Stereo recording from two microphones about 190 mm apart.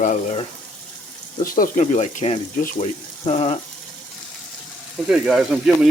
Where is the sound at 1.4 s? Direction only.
45° left (ahead or behind).